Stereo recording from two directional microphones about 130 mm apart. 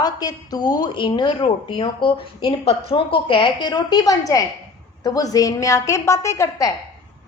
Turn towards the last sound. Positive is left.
turn(degrees=20)  # may be behind; listen again after turning